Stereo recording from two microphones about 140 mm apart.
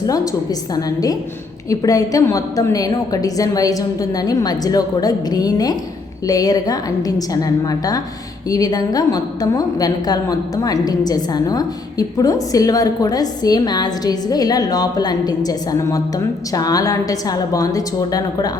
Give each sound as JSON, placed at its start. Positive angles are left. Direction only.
{"t": 0.0, "sound": "a woman's voice", "side_deg": 25}